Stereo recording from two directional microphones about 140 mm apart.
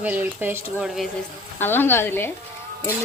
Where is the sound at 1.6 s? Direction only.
15° left (ahead or behind).